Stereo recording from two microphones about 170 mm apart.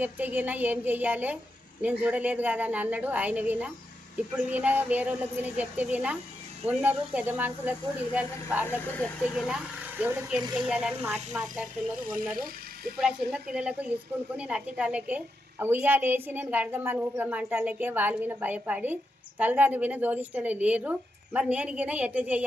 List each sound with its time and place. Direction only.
0.0 s a woman's voice: 10° right (ahead or behind)
10.4 s speech: 25° right (ahead or behind)
10.7 s a woman's voice: 10° right (ahead or behind)
12.0 s speech: 55° right (ahead or behind)
13.3 s a woman's voice: 5° right (ahead or behind)